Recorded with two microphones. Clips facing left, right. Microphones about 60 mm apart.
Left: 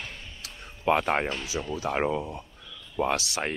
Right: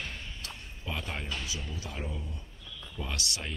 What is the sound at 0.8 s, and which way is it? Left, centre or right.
Speech, left.